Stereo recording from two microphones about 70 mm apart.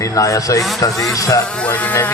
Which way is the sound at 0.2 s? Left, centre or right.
Left.